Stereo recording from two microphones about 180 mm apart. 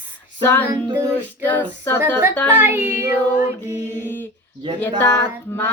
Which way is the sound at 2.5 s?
10° right (ahead or behind).